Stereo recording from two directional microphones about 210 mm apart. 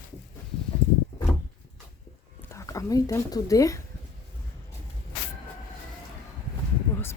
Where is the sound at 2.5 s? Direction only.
15° left (ahead or behind).